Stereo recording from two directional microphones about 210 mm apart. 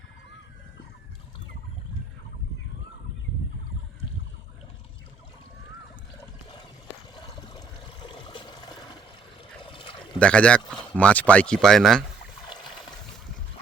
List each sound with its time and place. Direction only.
7.5 s a sound: 20° left (ahead or behind)
9.6 s pour: 25° left (ahead or behind)
10.2 s speech: 5° left (ahead or behind)